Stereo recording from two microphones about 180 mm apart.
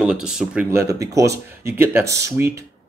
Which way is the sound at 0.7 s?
15° right (ahead or behind).